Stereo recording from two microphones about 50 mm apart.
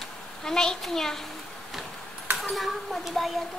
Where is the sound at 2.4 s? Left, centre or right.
Centre.